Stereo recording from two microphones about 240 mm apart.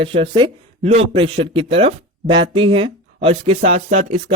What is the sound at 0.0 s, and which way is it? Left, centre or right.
Speech, right.